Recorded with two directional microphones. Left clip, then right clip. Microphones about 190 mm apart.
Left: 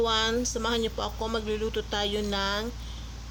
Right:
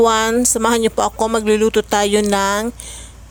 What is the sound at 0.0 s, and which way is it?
A woman's voice, 60° right (ahead or behind).